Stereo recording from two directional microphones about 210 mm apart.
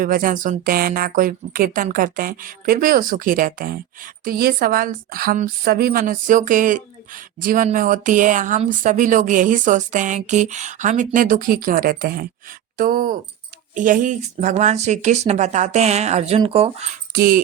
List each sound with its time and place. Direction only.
0.0 s a woman's voice: 40° right (ahead or behind)
17.1 s speech: 45° right (ahead or behind)